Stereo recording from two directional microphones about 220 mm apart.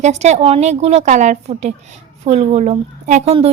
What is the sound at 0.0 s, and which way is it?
A woman's voice, 30° right (ahead or behind).